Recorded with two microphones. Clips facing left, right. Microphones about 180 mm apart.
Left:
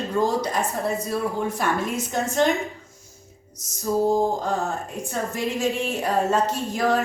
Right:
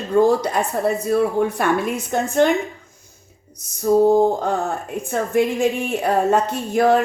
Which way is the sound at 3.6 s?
60° right (ahead or behind).